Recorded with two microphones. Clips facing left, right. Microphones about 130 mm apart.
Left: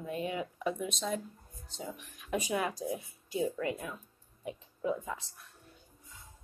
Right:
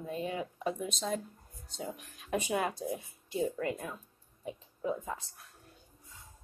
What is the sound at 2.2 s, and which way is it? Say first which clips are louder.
Speech: right 1 dB; 35° right (ahead or behind).